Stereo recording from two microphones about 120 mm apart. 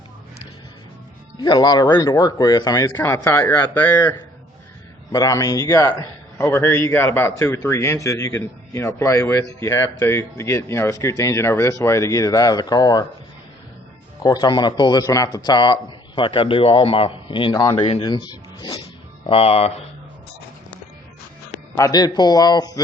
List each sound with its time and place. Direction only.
1.4 s a man's voice: 35° left (ahead or behind)
5.1 s a man's voice: 30° left (ahead or behind)
14.2 s a man's voice: 35° left (ahead or behind)
19.2 s speech: 50° left (ahead or behind)
21.8 s a man's voice: 30° left (ahead or behind)